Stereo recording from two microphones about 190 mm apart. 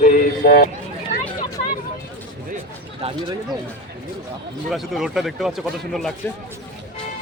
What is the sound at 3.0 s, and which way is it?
Speech, 35° right (ahead or behind).